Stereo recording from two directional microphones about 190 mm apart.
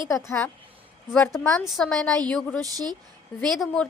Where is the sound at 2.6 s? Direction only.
20° right (ahead or behind).